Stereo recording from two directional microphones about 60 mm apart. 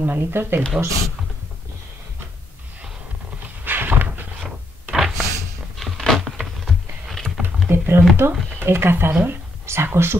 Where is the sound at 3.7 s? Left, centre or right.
Right.